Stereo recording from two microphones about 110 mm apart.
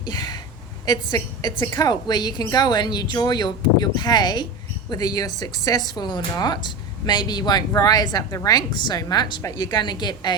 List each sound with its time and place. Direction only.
0.0 s a woman's voice: 40° left (ahead or behind)